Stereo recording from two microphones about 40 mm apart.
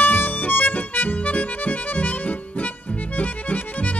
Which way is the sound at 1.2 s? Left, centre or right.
Left.